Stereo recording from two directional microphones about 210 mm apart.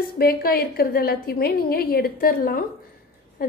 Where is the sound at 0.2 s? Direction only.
45° left (ahead or behind).